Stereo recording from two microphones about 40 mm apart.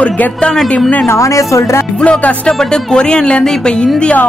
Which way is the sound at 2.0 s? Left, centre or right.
Left.